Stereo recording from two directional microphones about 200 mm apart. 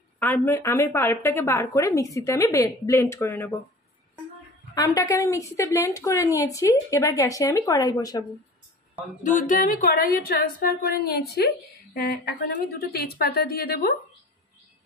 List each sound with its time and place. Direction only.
0.2 s a woman's voice: 10° left (ahead or behind)
4.7 s a woman's voice: 20° left (ahead or behind)
9.2 s a woman's voice: 40° left (ahead or behind)